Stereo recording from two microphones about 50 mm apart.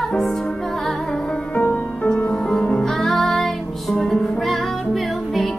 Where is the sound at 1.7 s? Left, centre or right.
Left.